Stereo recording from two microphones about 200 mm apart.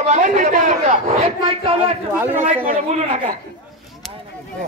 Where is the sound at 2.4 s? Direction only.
35° right (ahead or behind).